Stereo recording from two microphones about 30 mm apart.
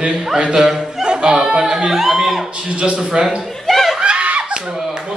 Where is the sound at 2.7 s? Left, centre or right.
Right.